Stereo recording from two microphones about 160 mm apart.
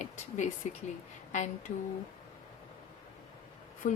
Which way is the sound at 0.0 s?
50° left (ahead or behind).